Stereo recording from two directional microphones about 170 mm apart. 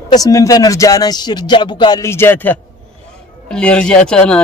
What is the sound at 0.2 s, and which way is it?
Speech, 20° left (ahead or behind).